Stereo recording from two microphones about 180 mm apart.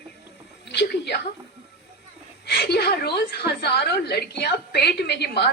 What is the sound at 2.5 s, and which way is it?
A woman's voice, 65° left (ahead or behind).